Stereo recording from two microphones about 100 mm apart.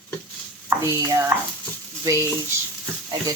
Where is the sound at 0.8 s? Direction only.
30° right (ahead or behind).